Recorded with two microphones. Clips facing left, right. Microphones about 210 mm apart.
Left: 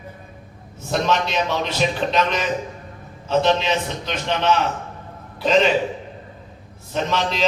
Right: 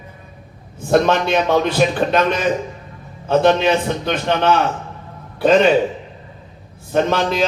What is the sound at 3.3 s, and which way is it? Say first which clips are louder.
A man's voice: right 5 dB; 55° right (ahead or behind).